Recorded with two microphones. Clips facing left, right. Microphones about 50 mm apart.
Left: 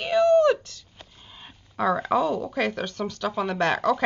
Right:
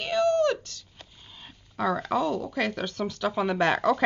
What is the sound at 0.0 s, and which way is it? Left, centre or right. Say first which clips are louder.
Speech: left 5 dB; centre.